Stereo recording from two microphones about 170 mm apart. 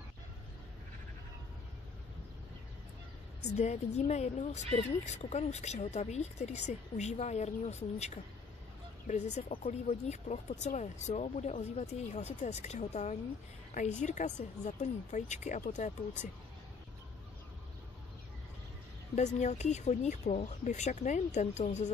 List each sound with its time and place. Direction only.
3.5 s speech: 40° left (ahead or behind)
19.1 s speech: 40° left (ahead or behind)